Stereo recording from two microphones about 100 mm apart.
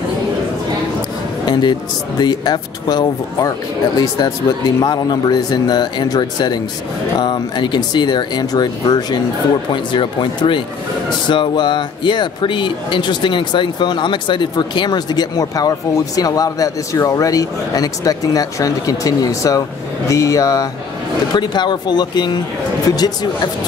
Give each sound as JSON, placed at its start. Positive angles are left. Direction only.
{"t": 1.5, "sound": "speech", "side_deg": 45}
{"t": 21.4, "sound": "speech", "side_deg": 45}